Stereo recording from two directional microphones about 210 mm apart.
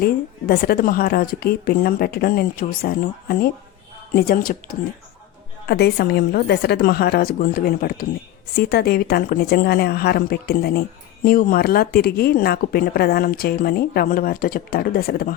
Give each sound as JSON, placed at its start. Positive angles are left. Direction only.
{"t": 0.0, "sound": "speech", "side_deg": 45}